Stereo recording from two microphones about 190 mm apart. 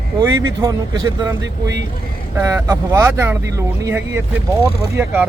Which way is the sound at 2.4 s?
15° right (ahead or behind).